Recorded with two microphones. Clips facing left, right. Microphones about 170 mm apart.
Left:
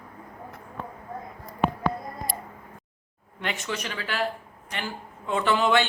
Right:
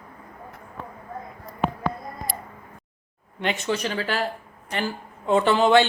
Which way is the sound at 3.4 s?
25° right (ahead or behind).